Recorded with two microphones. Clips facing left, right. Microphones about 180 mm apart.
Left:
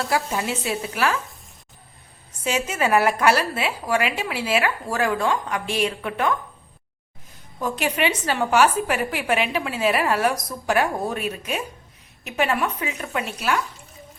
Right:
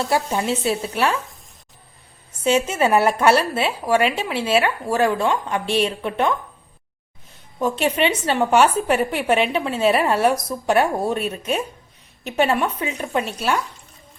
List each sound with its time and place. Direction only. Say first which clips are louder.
0.1 s a woman's voice: right 3 dB; 25° right (ahead or behind)
2.4 s a woman's voice: right 5 dB; 25° right (ahead or behind)
7.6 s a woman's voice: right 4 dB; 25° right (ahead or behind)